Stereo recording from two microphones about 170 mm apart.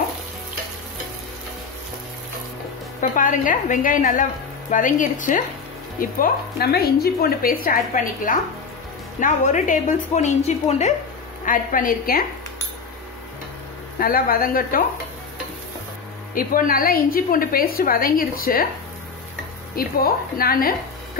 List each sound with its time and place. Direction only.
3.0 s a woman's voice: 50° left (ahead or behind)
11.4 s a woman's voice: 55° left (ahead or behind)
13.9 s speech: 60° left (ahead or behind)
16.3 s speech: 55° left (ahead or behind)
19.7 s speech: 60° left (ahead or behind)